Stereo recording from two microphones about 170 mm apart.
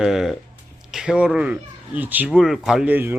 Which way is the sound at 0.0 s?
Centre (ahead or behind).